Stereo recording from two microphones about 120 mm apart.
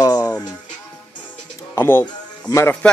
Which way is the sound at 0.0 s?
30° left (ahead or behind).